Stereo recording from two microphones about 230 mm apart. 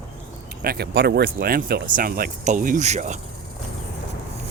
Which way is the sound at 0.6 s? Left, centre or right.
Right.